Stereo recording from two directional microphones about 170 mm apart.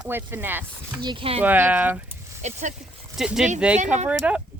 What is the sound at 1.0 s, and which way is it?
Speech, 30° right (ahead or behind).